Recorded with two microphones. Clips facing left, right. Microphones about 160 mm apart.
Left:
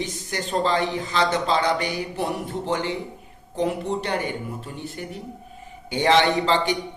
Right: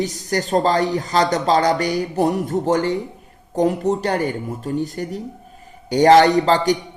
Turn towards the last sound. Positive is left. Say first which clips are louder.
# right 5 dB
turn(degrees=-40)  # may be behind; listen again after turning